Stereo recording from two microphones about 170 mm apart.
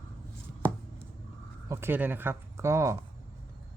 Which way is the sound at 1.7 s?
15° right (ahead or behind).